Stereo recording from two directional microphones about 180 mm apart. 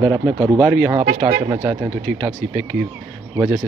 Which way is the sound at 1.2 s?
25° right (ahead or behind).